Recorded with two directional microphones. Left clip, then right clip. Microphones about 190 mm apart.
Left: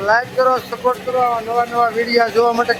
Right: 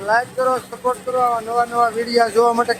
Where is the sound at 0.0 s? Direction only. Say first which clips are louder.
Left 3 dB; 5° right (ahead or behind).